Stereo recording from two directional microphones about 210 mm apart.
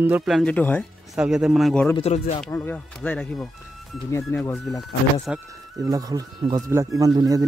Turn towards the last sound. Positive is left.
turn(degrees=-15)  # may be behind; listen again after turning